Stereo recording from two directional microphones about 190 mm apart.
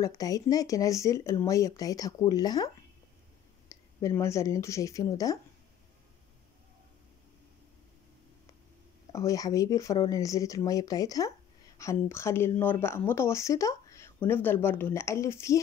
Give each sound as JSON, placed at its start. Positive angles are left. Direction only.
{"t": 0.0, "sound": "speech", "side_deg": 20}
{"t": 9.1, "sound": "speech", "side_deg": 20}